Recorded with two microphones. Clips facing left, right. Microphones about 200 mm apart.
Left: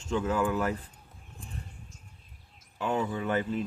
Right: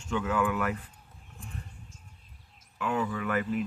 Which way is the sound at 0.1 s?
30° left (ahead or behind).